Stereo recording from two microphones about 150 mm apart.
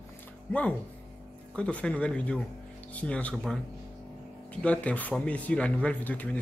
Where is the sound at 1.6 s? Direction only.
10° left (ahead or behind).